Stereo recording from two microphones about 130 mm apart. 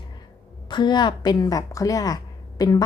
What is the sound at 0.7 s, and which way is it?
A woman's voice, 35° left (ahead or behind).